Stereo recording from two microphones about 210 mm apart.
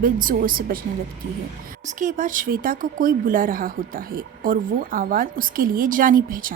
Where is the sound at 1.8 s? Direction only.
40° right (ahead or behind).